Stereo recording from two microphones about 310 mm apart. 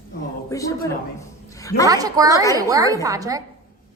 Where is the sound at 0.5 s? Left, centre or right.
Centre.